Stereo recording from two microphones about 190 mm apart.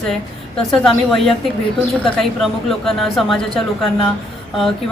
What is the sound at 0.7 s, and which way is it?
Speech, centre (ahead or behind).